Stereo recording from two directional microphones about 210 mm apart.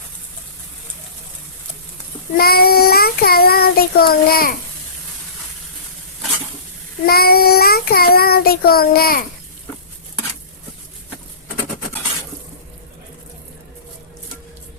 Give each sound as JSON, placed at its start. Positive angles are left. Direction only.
{"t": 2.3, "sound": "child singing", "side_deg": 45}
{"t": 7.0, "sound": "child singing", "side_deg": 45}